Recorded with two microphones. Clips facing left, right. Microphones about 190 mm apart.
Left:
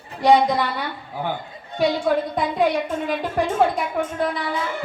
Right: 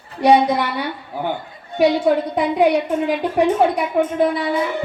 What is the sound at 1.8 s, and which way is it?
A woman's voice, 20° right (ahead or behind).